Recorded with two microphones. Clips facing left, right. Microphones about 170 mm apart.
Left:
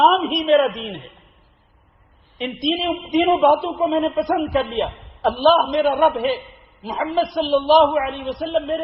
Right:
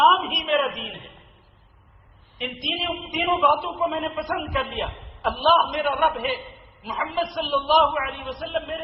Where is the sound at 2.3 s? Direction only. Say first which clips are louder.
Left 9 dB; 30° left (ahead or behind).